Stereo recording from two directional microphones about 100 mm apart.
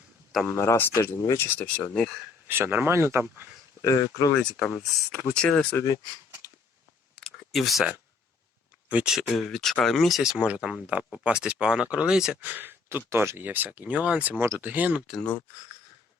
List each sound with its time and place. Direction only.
0.4 s speech: 30° left (ahead or behind); by 2.1 s 10° left (ahead or behind)
2.5 s speech: 20° right (ahead or behind)
3.8 s speech: 35° left (ahead or behind)
4.4 s speech: 5° left (ahead or behind)
7.2 s a sound: 5° left (ahead or behind)
8.9 s speech: 15° right (ahead or behind)
9.1 s speech: centre (ahead or behind)
15.1 s speech: 10° left (ahead or behind)